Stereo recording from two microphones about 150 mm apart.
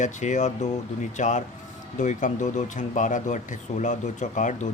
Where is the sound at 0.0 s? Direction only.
55° left (ahead or behind).